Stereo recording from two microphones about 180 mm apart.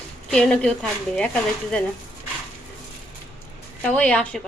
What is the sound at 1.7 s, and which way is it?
Speech, 5° left (ahead or behind).